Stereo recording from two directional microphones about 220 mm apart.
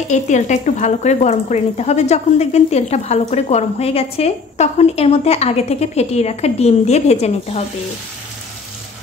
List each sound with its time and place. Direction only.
0.1 s speech: 35° left (ahead or behind)